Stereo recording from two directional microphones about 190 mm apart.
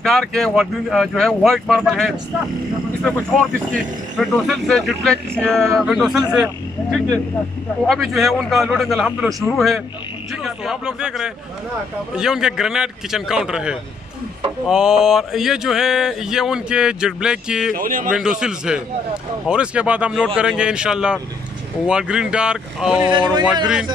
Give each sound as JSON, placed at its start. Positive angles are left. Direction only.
{"t": 0.0, "sound": "mantra", "side_deg": 5}
{"t": 17.7, "sound": "a man's voice", "side_deg": -45}
{"t": 18.1, "sound": "mantra", "side_deg": -5}